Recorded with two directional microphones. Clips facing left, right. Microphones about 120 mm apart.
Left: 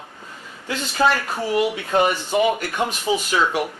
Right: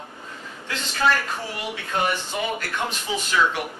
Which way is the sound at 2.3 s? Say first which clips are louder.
Left 8 dB; 15° left (ahead or behind).